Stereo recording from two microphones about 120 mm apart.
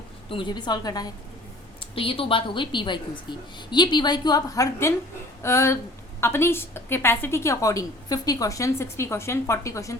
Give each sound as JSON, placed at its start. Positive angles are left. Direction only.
{"t": 0.3, "sound": "a woman's voice", "side_deg": 40}
{"t": 2.0, "sound": "a woman's voice", "side_deg": 50}